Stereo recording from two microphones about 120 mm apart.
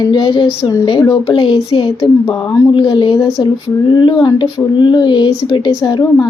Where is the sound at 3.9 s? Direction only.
40° left (ahead or behind).